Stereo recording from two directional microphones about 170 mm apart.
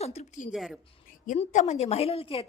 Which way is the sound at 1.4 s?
45° left (ahead or behind).